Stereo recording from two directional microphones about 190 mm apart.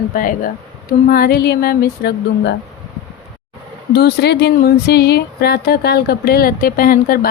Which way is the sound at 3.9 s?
60° left (ahead or behind).